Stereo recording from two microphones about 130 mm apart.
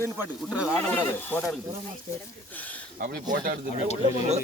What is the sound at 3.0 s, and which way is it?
Speech, 90° right.